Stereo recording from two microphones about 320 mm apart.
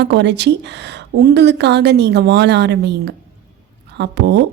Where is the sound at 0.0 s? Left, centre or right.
Right.